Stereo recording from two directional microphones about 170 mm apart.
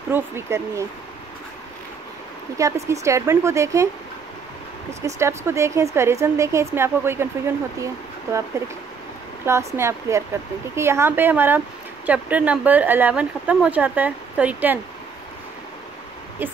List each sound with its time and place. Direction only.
0.1 s a woman's voice: 15° right (ahead or behind)
2.5 s a woman's voice: 20° right (ahead or behind)
5.0 s a woman's voice: 15° right (ahead or behind)